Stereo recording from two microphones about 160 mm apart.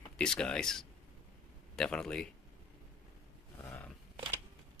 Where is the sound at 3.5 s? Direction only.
10° left (ahead or behind).